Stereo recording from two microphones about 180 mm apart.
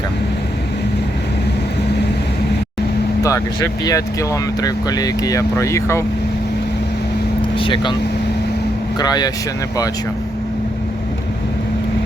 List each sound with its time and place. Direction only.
3.2 s speech: 15° left (ahead or behind)
7.6 s speech: 25° left (ahead or behind)
9.0 s speech: 20° left (ahead or behind)